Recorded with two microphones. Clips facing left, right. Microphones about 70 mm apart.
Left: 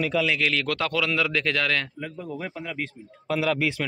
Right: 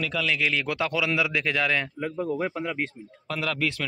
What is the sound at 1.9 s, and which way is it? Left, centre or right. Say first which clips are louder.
Speech: right 6 dB; right.